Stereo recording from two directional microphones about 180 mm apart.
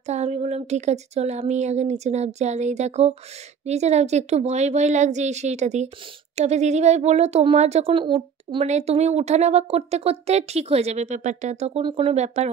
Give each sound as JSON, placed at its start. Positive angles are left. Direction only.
{"t": 0.0, "sound": "speech", "side_deg": -40}